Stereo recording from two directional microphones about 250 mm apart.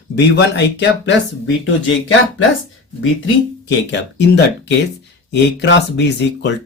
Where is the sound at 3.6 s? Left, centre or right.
Left.